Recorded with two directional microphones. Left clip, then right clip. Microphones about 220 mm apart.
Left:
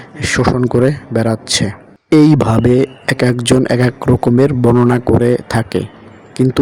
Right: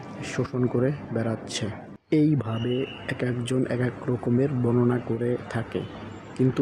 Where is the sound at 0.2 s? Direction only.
40° left (ahead or behind).